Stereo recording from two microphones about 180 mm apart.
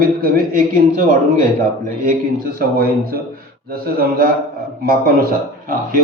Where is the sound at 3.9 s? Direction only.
55° right (ahead or behind).